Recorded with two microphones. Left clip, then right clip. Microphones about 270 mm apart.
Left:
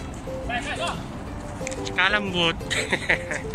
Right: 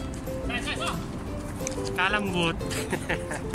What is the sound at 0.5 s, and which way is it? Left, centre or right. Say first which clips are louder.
Music: left 3 dB; left.